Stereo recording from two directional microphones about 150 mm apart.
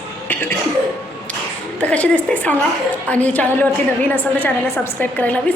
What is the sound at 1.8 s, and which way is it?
A woman's voice, 10° left (ahead or behind).